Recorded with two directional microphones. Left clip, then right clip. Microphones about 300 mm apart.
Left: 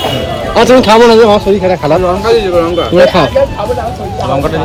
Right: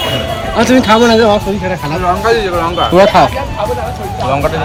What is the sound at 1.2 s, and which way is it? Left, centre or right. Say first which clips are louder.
Speech: left 4 dB; centre.